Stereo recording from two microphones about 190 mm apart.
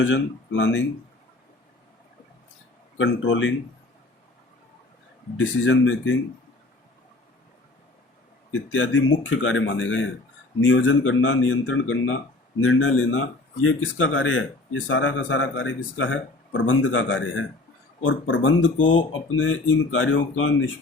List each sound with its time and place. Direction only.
0.0 s speech: 75° left (ahead or behind)
3.0 s speech: 75° left (ahead or behind)
5.4 s speech: 85° left
8.7 s a man's voice: 85° left